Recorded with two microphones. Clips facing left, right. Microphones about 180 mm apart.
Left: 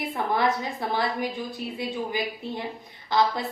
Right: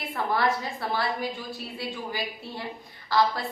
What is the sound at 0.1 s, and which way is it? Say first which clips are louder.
A woman's voice: even; 20° left (ahead or behind).